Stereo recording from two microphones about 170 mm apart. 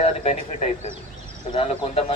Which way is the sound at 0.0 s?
40° left (ahead or behind).